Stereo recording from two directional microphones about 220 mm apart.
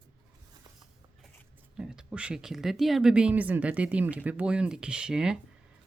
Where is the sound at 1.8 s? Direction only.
5° right (ahead or behind).